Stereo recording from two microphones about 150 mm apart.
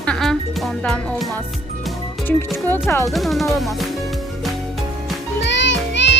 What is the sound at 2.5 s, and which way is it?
Speech, 15° left (ahead or behind).